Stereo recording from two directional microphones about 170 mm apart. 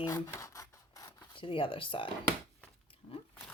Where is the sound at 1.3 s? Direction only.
30° left (ahead or behind).